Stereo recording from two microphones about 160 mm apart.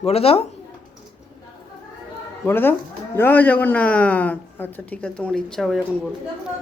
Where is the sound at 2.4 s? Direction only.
15° left (ahead or behind).